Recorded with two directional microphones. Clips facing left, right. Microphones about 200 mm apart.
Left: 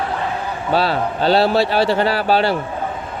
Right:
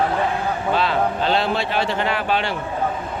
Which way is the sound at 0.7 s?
35° left (ahead or behind).